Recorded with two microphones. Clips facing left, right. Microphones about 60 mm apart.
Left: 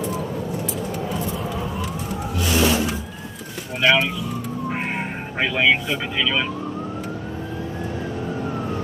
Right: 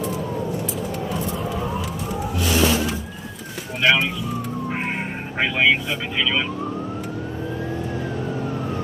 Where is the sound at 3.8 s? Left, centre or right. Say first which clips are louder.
Left 1 dB; centre.